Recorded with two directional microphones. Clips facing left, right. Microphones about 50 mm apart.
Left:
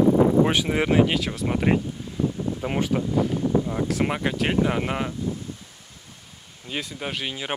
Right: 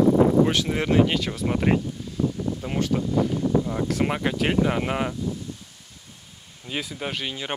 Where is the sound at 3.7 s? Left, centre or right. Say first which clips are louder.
Even; centre.